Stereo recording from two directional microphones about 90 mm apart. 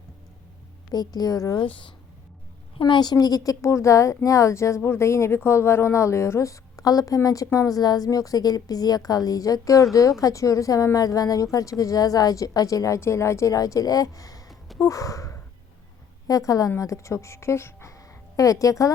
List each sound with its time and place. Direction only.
0.9 s a woman's voice: 45° left (ahead or behind)
2.7 s a woman's voice: 60° left (ahead or behind); by 14.5 s 40° left (ahead or behind)
14.8 s sigh: 40° left (ahead or behind)
16.2 s speech: 40° left (ahead or behind)